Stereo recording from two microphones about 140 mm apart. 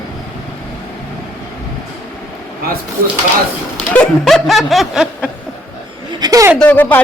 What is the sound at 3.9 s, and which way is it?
Snicker, 5° left (ahead or behind).